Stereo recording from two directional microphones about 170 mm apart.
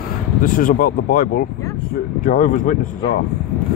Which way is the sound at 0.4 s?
55° left (ahead or behind).